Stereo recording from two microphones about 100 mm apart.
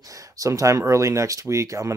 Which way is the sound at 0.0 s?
35° right (ahead or behind).